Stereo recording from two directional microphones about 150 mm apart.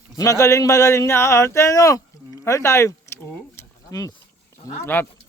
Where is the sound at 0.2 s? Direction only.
20° left (ahead or behind).